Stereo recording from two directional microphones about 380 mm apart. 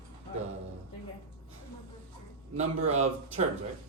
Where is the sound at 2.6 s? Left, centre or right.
Centre.